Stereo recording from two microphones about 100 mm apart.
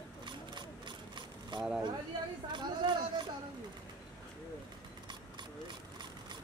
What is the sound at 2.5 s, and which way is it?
Speech, 50° right (ahead or behind).